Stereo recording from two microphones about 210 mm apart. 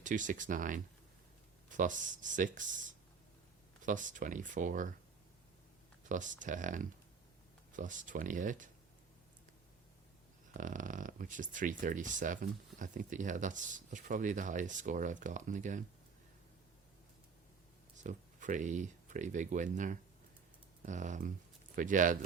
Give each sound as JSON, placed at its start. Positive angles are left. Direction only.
{"t": 0.0, "sound": "speech", "side_deg": -35}
{"t": 6.1, "sound": "speech", "side_deg": -35}
{"t": 10.6, "sound": "speech", "side_deg": -40}
{"t": 17.9, "sound": "speech", "side_deg": -35}